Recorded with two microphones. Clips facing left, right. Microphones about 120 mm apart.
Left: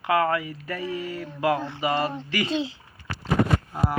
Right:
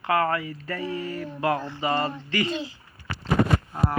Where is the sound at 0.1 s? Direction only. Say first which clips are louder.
Left 1 dB; 15° left (ahead or behind).